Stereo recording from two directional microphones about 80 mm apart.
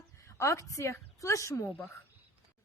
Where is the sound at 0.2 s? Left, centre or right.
Left.